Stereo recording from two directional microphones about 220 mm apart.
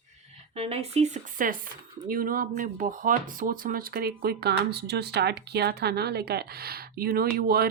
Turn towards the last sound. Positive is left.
turn(degrees=-45)  # may be behind; listen again after turning